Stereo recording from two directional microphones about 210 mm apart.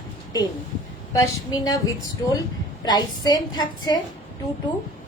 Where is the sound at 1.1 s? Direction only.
15° left (ahead or behind).